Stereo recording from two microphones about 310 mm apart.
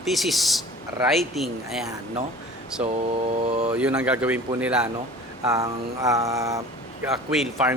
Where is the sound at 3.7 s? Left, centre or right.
Centre.